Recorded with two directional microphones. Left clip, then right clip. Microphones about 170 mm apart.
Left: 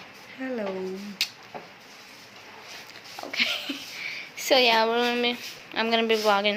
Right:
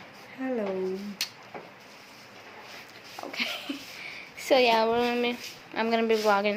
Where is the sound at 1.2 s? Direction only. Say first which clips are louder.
Left 6 dB; 10° right (ahead or behind).